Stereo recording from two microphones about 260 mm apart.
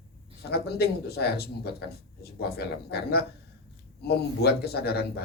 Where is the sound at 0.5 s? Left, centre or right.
Left.